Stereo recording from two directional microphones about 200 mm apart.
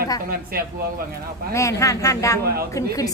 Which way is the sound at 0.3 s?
50° right (ahead or behind).